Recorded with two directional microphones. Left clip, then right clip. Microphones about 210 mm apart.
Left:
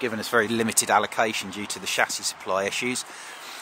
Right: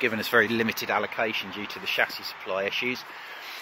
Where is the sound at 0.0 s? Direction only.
Centre (ahead or behind).